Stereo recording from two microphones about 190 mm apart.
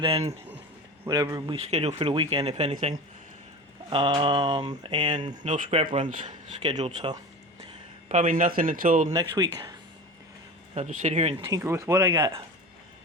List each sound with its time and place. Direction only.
0.0 s speech: 30° right (ahead or behind)
1.0 s mantra: 20° right (ahead or behind)
1.6 s speech: 35° right (ahead or behind)
3.8 s mantra: 25° right (ahead or behind)
4.9 s speech: 35° right (ahead or behind)
6.6 s mantra: 25° right (ahead or behind)
8.1 s speech: 45° right (ahead or behind)
9.1 s mantra: 20° right (ahead or behind)
10.8 s speech: 35° right (ahead or behind)
11.4 s speech: 15° right (ahead or behind)
12.1 s mantra: 20° right (ahead or behind)